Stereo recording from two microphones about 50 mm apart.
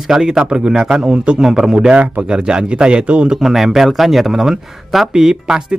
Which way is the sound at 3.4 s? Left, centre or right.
Centre.